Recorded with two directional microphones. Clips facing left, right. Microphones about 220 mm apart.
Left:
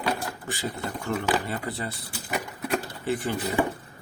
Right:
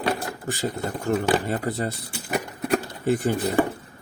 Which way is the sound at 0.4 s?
45° right (ahead or behind).